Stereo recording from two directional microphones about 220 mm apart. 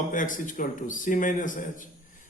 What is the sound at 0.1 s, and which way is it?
A man's voice, 35° left (ahead or behind).